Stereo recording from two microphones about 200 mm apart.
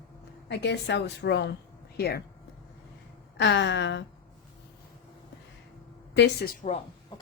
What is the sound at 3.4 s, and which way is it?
Speech, 60° left (ahead or behind).